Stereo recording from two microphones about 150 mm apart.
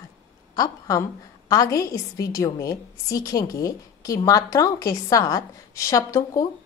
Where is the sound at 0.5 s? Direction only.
25° left (ahead or behind).